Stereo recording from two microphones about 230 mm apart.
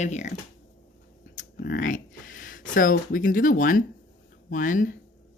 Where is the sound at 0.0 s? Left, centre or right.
Left.